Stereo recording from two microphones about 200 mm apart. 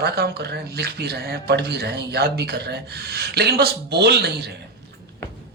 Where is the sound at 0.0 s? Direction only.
55° right (ahead or behind).